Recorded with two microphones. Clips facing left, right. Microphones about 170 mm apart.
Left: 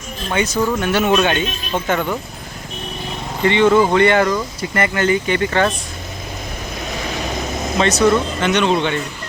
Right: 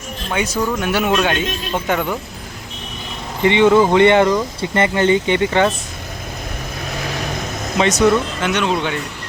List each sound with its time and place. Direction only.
0.5 s speech: 10° right (ahead or behind)
3.4 s speech: 15° right (ahead or behind)
5.5 s speech: 10° right (ahead or behind)
7.9 s speech: 5° right (ahead or behind)